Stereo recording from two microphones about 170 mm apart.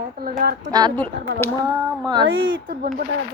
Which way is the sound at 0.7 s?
25° right (ahead or behind).